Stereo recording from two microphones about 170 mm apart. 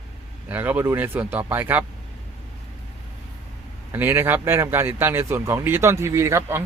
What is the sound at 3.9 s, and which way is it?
Speech, 10° right (ahead or behind).